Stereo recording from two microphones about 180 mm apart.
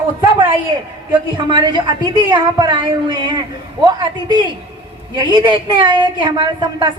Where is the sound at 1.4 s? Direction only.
25° right (ahead or behind).